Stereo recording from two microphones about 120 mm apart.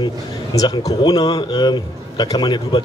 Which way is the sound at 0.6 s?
30° left (ahead or behind).